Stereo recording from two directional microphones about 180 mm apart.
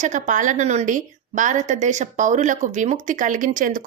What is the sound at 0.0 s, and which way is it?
A woman's voice, 45° right (ahead or behind).